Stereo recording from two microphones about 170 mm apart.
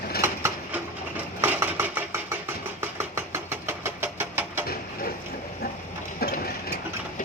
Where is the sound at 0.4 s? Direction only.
10° right (ahead or behind).